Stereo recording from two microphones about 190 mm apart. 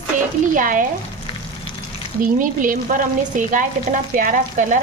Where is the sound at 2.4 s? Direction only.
45° right (ahead or behind).